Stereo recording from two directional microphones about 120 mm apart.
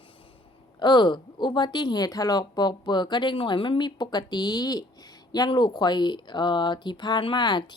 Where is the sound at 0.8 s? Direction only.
40° left (ahead or behind).